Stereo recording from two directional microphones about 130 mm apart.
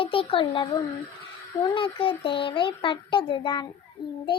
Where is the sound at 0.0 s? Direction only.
45° left (ahead or behind).